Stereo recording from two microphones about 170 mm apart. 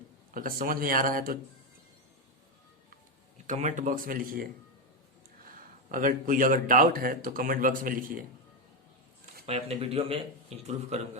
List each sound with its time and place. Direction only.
0.3 s speech: 55° right (ahead or behind)
3.3 s speech: 45° right (ahead or behind)
5.9 s speech: 55° right (ahead or behind)
9.5 s speech: 35° right (ahead or behind)